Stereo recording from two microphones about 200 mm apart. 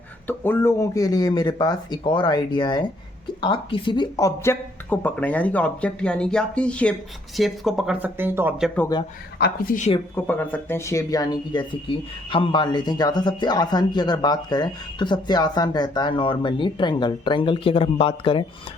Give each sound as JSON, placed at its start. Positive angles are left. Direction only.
{"t": 0.3, "sound": "speech", "side_deg": 10}
{"t": 9.4, "sound": "speech", "side_deg": 45}
{"t": 10.2, "sound": "speech", "side_deg": 10}